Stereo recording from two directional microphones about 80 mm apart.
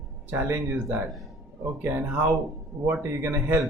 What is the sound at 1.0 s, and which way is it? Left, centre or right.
Speech, centre.